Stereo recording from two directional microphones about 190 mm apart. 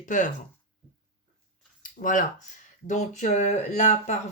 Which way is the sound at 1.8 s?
45° left (ahead or behind).